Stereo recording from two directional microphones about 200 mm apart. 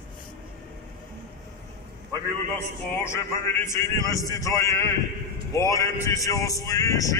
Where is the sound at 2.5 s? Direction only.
10° left (ahead or behind).